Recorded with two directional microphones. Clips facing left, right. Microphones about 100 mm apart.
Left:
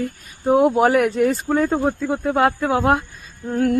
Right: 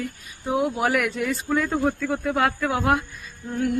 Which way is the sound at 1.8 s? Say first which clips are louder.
Left 3 dB; 25° left (ahead or behind).